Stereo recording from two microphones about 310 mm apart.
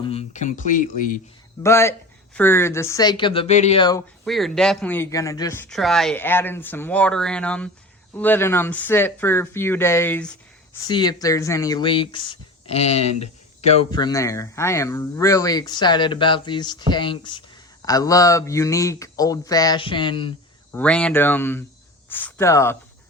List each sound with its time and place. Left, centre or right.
0.0 s speech: centre
1.6 s speech: centre
4.3 s speech: centre
20.7 s speech: centre